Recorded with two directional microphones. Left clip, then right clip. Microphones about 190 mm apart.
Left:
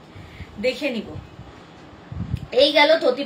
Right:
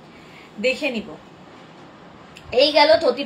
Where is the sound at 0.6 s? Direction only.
20° left (ahead or behind).